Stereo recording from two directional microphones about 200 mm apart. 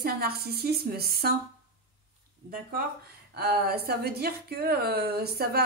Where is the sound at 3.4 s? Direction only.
50° right (ahead or behind).